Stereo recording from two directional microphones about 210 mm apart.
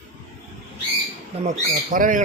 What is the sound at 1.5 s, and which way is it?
Speech, 40° right (ahead or behind).